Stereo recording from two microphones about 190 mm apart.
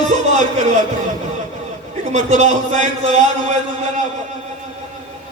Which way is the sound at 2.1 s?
35° right (ahead or behind).